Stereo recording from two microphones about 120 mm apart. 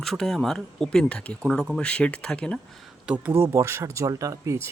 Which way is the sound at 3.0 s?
10° right (ahead or behind).